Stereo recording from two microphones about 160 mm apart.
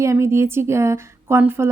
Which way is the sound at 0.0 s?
15° right (ahead or behind).